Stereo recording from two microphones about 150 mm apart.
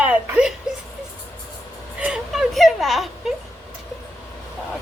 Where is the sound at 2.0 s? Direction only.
5° right (ahead or behind).